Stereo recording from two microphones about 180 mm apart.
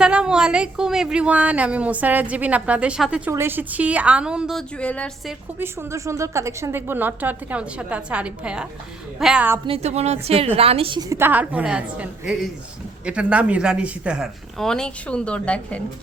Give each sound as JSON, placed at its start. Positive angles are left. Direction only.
{"t": 0.0, "sound": "a woman's voice", "side_deg": -5}
{"t": 5.5, "sound": "a woman's voice", "side_deg": -15}
{"t": 9.6, "sound": "a woman's voice", "side_deg": -35}
{"t": 11.1, "sound": "a woman's voice", "side_deg": -10}
{"t": 13.1, "sound": "speech", "side_deg": -5}